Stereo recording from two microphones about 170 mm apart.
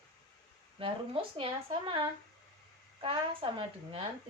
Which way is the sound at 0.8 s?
30° right (ahead or behind).